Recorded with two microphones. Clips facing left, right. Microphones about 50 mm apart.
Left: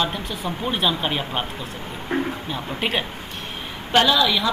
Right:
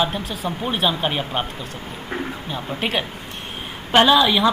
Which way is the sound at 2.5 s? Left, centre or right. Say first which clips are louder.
Right 3 dB; centre.